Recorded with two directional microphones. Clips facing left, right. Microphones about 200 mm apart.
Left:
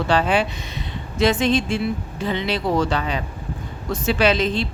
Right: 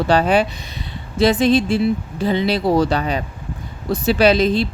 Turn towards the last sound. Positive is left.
turn(degrees=-35)  # may be behind; listen again after turning